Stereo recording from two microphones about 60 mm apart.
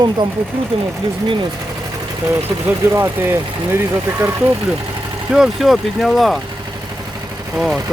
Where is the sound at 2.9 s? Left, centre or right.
Right.